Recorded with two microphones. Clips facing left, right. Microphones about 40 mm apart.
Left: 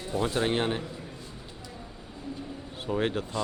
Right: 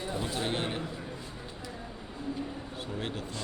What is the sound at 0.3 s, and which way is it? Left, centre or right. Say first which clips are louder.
Speech: left 6 dB; left.